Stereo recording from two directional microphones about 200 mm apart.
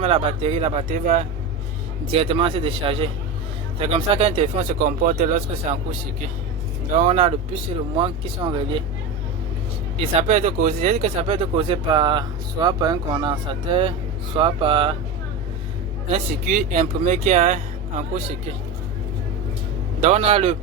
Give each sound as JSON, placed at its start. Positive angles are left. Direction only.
{"t": 0.0, "sound": "speech", "side_deg": -30}
{"t": 2.0, "sound": "speech", "side_deg": -25}
{"t": 4.8, "sound": "speech", "side_deg": -40}
{"t": 6.9, "sound": "speech", "side_deg": -35}
{"t": 10.0, "sound": "speech", "side_deg": -30}
{"t": 16.1, "sound": "speech", "side_deg": -35}
{"t": 20.0, "sound": "speech", "side_deg": -30}